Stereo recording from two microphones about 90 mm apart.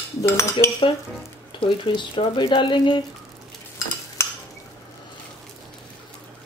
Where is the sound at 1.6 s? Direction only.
65° left (ahead or behind).